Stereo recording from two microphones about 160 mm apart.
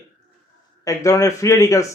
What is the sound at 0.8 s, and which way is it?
Speech, 20° left (ahead or behind).